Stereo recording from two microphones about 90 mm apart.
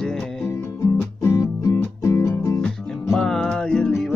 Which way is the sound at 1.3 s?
35° left (ahead or behind).